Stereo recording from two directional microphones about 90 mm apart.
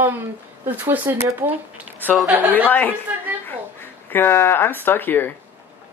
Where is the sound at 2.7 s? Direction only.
20° left (ahead or behind).